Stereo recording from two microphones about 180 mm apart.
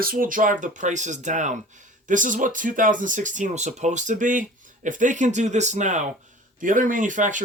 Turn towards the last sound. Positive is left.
turn(degrees=-45)  # may be behind; listen again after turning